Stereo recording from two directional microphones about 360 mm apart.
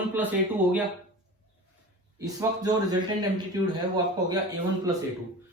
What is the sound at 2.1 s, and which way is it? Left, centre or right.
A man's voice, centre.